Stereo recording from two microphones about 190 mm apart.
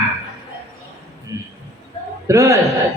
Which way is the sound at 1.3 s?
20° right (ahead or behind).